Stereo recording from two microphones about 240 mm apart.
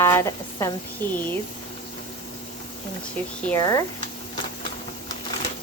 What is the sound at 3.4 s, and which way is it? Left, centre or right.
Speech, centre.